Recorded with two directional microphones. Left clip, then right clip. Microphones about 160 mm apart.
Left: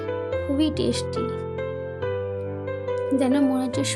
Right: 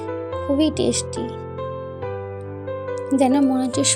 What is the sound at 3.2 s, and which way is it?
Speech, 20° right (ahead or behind).